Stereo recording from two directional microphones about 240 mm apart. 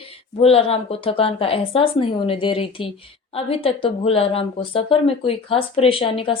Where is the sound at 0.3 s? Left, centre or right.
Left.